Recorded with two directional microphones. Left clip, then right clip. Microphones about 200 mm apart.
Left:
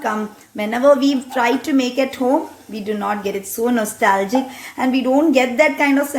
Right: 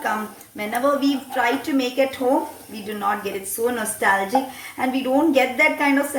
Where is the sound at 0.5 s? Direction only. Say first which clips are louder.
Left 7 dB; 50° left (ahead or behind).